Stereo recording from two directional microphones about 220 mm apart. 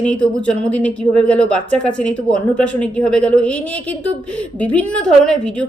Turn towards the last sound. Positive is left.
turn(degrees=5)  # may be behind; listen again after turning